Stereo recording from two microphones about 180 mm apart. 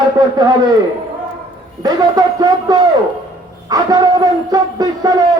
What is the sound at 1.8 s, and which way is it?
Speech, 20° right (ahead or behind).